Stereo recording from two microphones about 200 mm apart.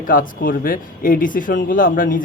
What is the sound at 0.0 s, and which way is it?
Speech, 45° left (ahead or behind).